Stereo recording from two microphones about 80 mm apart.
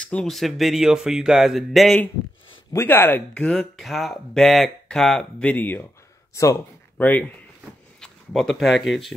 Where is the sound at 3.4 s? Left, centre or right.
Centre.